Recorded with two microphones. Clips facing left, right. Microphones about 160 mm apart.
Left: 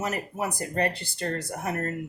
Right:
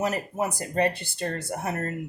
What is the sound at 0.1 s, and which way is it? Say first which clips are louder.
Speech: right 2 dB; 25° right (ahead or behind).